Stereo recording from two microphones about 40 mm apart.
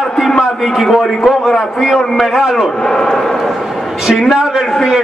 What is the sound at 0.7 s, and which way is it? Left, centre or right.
Speech, centre.